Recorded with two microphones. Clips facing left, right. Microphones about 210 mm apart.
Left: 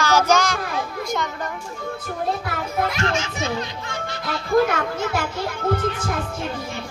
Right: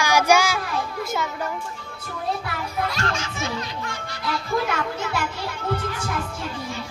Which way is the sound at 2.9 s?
25° left (ahead or behind).